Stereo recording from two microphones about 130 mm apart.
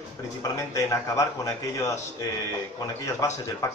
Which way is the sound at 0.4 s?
25° left (ahead or behind).